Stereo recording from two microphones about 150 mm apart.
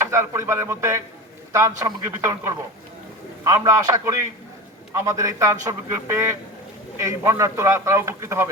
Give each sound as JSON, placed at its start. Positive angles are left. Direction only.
{"t": 0.0, "sound": "a man's voice", "side_deg": -20}